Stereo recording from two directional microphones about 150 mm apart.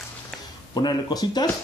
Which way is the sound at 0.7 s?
25° left (ahead or behind).